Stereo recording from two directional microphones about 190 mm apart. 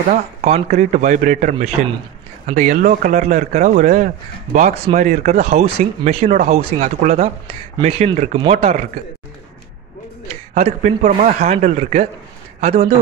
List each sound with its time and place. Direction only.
0.1 s speech: 35° right (ahead or behind)
10.5 s speech: 40° right (ahead or behind)
11.5 s speech: 35° right (ahead or behind)